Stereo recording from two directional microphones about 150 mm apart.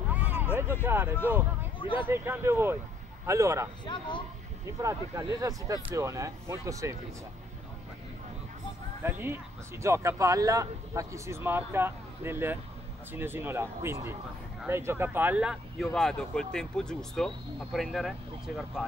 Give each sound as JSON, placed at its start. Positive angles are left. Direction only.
{"t": 0.1, "sound": "a sound", "side_deg": -10}
{"t": 0.8, "sound": "speech", "side_deg": -15}
{"t": 1.8, "sound": "speech", "side_deg": 35}
{"t": 2.0, "sound": "speech", "side_deg": -15}
{"t": 3.8, "sound": "speech", "side_deg": 30}
{"t": 4.6, "sound": "speech", "side_deg": -20}
{"t": 9.0, "sound": "speech", "side_deg": -15}
{"t": 15.9, "sound": "speech", "side_deg": 5}